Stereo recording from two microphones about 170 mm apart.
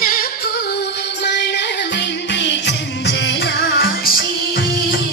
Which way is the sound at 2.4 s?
90° left.